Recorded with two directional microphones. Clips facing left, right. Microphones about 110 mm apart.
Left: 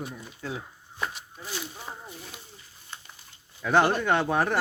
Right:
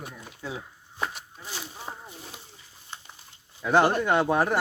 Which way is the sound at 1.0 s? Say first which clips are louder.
Right 1 dB; 35° right (ahead or behind).